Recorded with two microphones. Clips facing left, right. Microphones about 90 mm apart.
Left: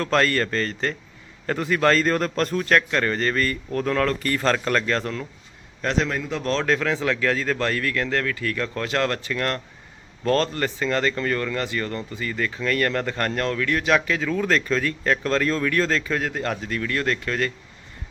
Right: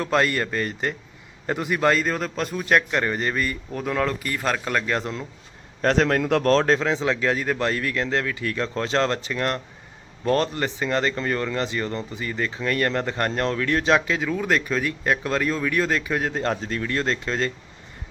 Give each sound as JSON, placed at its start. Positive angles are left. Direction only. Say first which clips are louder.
{"t": 0.0, "sound": "a man's voice", "louder": "left 1 dB", "side_deg": -15}
{"t": 5.8, "sound": "a man's voice", "louder": "right 4 dB", "side_deg": -45}
{"t": 6.5, "sound": "speech", "louder": "right 3 dB", "side_deg": -40}
{"t": 6.7, "sound": "a man's voice", "louder": "right 1 dB", "side_deg": -20}